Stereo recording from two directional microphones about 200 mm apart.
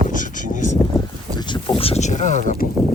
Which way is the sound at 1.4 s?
20° left (ahead or behind).